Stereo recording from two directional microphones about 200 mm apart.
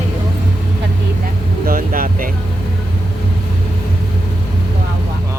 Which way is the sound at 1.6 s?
45° right (ahead or behind).